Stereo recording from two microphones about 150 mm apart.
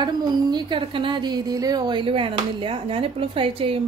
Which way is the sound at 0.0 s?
30° right (ahead or behind).